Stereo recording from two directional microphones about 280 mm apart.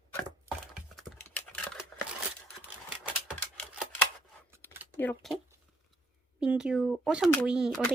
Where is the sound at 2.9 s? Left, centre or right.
Centre.